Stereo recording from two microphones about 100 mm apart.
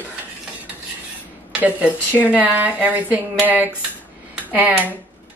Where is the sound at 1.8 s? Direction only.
15° left (ahead or behind).